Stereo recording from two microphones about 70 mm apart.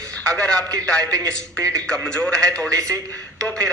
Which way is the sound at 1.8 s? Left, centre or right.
Centre.